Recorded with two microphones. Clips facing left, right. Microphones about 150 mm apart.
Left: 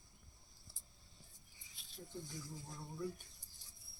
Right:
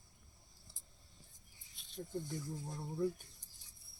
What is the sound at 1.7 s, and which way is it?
Rodents, centre (ahead or behind).